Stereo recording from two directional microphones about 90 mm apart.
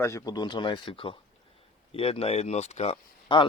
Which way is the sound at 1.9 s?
90° left.